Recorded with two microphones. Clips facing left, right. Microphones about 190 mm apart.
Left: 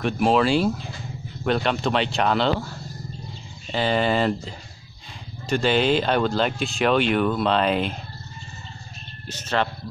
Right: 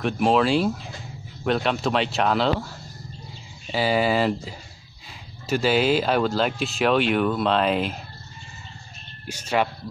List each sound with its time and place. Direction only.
0.0 s speech: centre (ahead or behind)
9.3 s speech: 10° right (ahead or behind)